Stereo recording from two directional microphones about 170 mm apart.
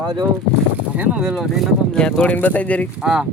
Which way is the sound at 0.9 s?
5° right (ahead or behind).